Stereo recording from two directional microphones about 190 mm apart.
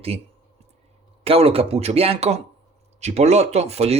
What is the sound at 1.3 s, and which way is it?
Speech, 30° right (ahead or behind).